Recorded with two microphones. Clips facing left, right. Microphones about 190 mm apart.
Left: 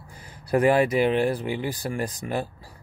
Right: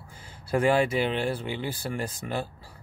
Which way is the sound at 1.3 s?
10° left (ahead or behind).